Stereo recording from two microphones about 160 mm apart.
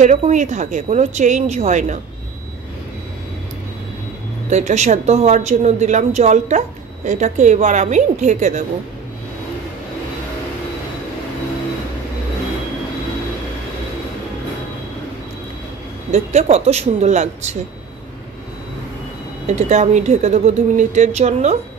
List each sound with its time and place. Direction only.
0.0 s speech: 50° right (ahead or behind)
4.5 s speech: 45° right (ahead or behind)
16.1 s speech: 45° right (ahead or behind)
19.4 s speech: 45° right (ahead or behind)